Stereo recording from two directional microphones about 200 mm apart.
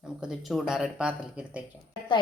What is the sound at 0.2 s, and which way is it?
Frying, centre (ahead or behind).